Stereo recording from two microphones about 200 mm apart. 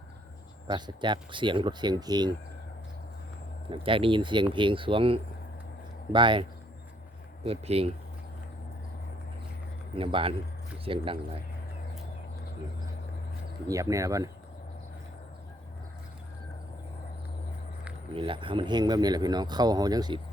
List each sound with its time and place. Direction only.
0.7 s a man's voice: 20° right (ahead or behind)
3.7 s a man's voice: 25° right (ahead or behind)
7.4 s a man's voice: 30° right (ahead or behind)
9.9 s a man's voice: 25° right (ahead or behind)
13.7 s speech: 15° right (ahead or behind)
18.1 s a man's voice: 25° right (ahead or behind)